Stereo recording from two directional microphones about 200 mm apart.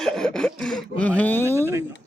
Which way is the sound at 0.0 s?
5° left (ahead or behind).